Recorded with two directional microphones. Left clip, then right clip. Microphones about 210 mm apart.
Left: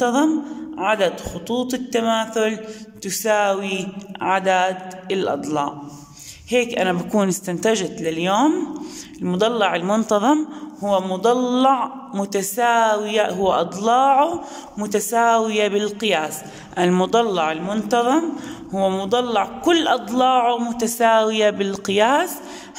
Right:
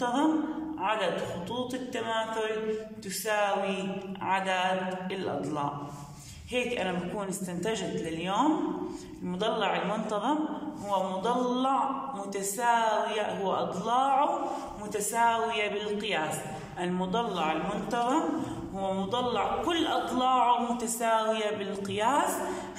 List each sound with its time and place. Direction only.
0.0 s a man's voice: 50° left (ahead or behind)